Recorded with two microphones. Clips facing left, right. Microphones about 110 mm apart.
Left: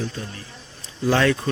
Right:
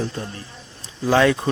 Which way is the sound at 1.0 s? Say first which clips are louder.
Right 2 dB; 10° right (ahead or behind).